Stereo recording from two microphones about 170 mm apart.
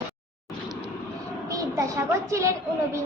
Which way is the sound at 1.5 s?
20° right (ahead or behind).